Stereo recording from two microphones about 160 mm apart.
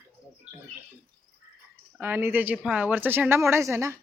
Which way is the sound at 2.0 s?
15° right (ahead or behind).